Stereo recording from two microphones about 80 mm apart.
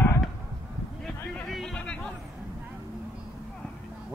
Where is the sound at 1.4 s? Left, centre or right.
Centre.